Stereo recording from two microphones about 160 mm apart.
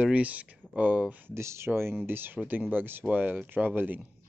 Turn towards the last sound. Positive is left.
turn(degrees=-10)  # may be behind; listen again after turning